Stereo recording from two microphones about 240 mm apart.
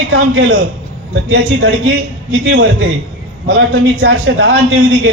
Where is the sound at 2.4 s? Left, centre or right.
Right.